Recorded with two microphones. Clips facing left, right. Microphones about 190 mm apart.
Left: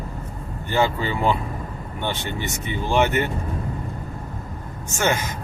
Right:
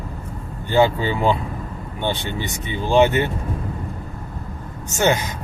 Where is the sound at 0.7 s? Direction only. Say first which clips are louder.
Right 4 dB; 20° right (ahead or behind).